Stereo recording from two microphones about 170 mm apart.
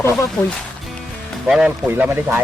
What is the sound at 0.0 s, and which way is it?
Speech, 15° left (ahead or behind).